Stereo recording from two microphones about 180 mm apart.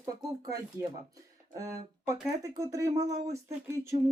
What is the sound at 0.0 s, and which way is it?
Speech, 20° right (ahead or behind).